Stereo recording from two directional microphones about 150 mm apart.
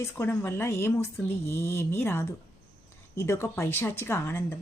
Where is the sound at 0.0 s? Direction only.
15° left (ahead or behind).